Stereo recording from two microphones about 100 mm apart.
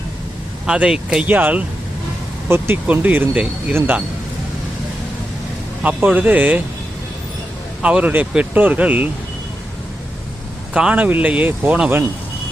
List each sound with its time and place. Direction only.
0.6 s speech: 5° right (ahead or behind)
1.3 s speech: 15° right (ahead or behind)
2.8 s speech: 15° right (ahead or behind)
5.8 s speech: 15° right (ahead or behind)
7.8 s speech: 10° right (ahead or behind)
10.8 s speech: 10° right (ahead or behind)